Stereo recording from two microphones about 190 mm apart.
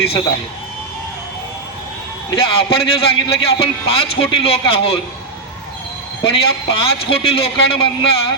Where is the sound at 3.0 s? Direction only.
30° left (ahead or behind).